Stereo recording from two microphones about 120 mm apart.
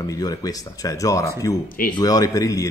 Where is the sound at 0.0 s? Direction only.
30° left (ahead or behind).